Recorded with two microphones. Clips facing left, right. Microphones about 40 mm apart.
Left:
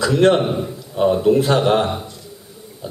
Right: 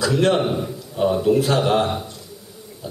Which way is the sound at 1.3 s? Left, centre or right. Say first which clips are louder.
Left 2 dB; left.